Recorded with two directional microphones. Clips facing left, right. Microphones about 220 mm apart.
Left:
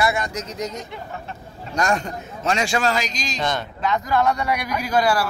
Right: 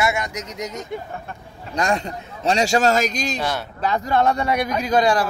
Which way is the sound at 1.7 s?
30° right (ahead or behind).